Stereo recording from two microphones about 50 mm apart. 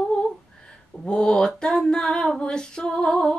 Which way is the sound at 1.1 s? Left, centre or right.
Centre.